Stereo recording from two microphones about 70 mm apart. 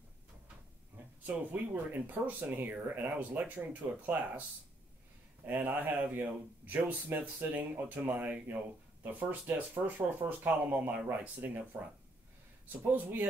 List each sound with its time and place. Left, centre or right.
1.2 s speech: right
5.5 s speech: right
12.6 s speech: right